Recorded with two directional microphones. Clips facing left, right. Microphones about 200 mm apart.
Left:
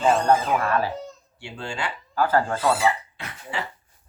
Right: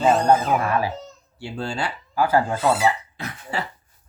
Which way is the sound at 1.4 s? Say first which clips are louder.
Right 4 dB; 35° right (ahead or behind).